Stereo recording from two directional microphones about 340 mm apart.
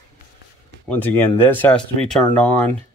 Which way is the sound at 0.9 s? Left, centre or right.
Centre.